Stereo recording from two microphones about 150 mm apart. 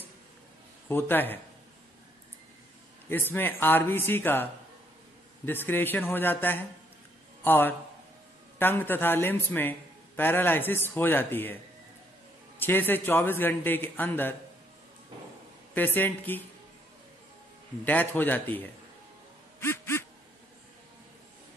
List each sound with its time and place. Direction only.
0.8 s a man's voice: 15° left (ahead or behind)
3.1 s a man's voice: 15° left (ahead or behind)
12.5 s a man's voice: 15° left (ahead or behind)
15.7 s a man's voice: 15° left (ahead or behind)
17.8 s a man's voice: 10° left (ahead or behind)
19.6 s quack: 15° left (ahead or behind)